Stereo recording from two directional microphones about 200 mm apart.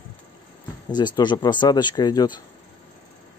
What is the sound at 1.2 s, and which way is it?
Speech, 20° left (ahead or behind).